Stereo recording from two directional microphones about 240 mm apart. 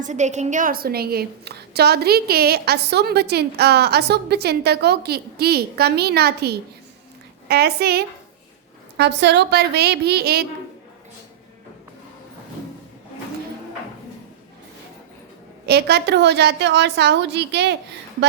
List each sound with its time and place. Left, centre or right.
0.0 s a woman's voice: right
15.6 s a woman's voice: right